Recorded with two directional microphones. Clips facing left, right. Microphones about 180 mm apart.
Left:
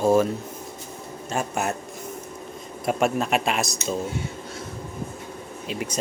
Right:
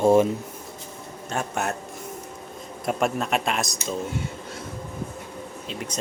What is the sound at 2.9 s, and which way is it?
Speech, centre (ahead or behind).